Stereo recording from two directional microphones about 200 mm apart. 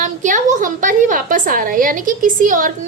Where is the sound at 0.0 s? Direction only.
40° right (ahead or behind).